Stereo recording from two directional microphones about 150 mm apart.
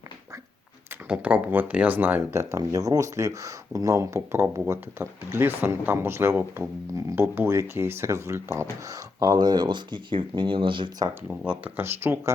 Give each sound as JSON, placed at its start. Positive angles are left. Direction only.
{"t": 1.0, "sound": "speech", "side_deg": -10}
{"t": 11.3, "sound": "speech", "side_deg": -10}